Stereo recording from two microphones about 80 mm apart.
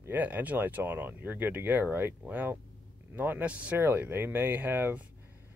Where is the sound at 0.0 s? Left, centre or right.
Right.